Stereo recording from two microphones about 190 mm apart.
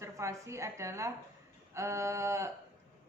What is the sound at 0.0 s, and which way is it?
A woman's voice, 15° right (ahead or behind).